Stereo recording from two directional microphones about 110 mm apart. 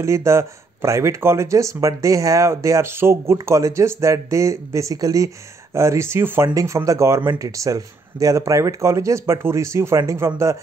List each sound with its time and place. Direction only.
0.0 s speech: 25° right (ahead or behind)